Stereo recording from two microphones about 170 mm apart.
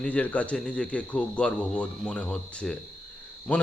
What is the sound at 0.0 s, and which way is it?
A man's voice, 10° left (ahead or behind).